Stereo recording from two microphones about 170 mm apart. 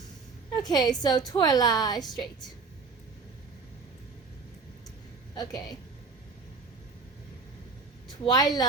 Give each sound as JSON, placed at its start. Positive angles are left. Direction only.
{"t": 0.5, "sound": "a woman's voice", "side_deg": 25}
{"t": 5.3, "sound": "speech", "side_deg": 25}
{"t": 8.2, "sound": "a woman's voice", "side_deg": 20}